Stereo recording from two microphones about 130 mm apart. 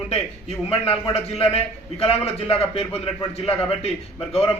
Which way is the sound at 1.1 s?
50° left (ahead or behind).